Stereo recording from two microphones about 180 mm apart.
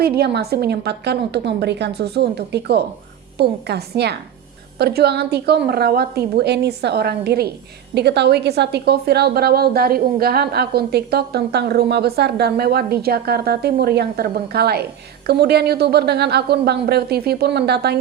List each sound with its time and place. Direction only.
0.2 s a woman's voice: 65° right (ahead or behind)